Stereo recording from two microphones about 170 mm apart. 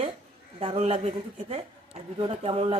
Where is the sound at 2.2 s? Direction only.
35° right (ahead or behind).